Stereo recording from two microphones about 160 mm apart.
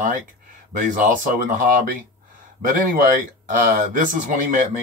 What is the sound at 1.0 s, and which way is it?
Speech, 55° right (ahead or behind).